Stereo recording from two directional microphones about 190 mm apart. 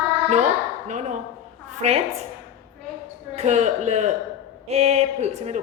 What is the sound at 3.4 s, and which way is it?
A woman's voice, 35° right (ahead or behind).